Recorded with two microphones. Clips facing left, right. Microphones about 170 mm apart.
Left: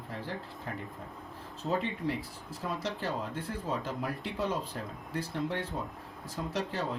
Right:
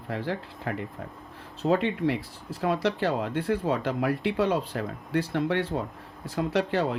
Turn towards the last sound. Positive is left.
turn(degrees=-75)  # may be behind; listen again after turning